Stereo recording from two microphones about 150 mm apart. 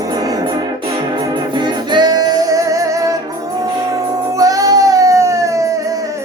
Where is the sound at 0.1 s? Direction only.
25° right (ahead or behind).